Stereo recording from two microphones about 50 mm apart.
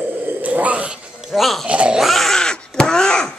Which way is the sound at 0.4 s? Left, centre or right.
Right.